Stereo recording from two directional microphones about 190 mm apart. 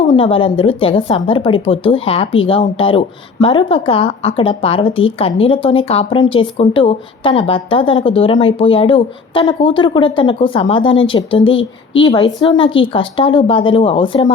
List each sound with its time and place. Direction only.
0.1 s speech: 30° left (ahead or behind)